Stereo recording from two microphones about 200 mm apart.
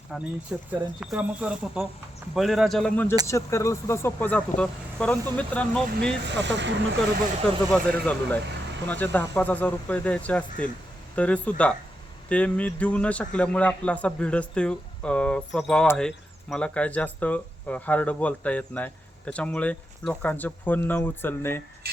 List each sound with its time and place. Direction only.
0.1 s speech: 5° right (ahead or behind)
6.2 s speech: 60° right (ahead or behind)
7.7 s speech: 5° left (ahead or behind)